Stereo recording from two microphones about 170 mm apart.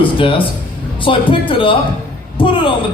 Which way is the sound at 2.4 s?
30° left (ahead or behind).